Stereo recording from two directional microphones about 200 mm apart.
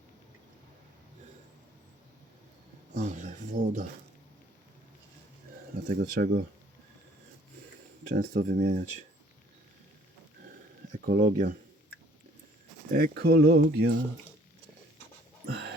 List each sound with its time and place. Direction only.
2.9 s speech: 35° right (ahead or behind)
5.9 s speech: 50° right (ahead or behind)
8.1 s speech: 45° right (ahead or behind)
11.0 s speech: 45° right (ahead or behind)
12.9 s speech: 50° right (ahead or behind)
15.4 s a sound: 55° right (ahead or behind)